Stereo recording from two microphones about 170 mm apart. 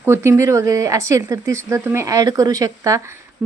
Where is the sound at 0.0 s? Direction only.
15° right (ahead or behind).